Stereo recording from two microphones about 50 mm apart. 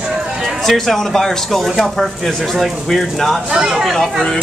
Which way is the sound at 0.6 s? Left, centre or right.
Centre.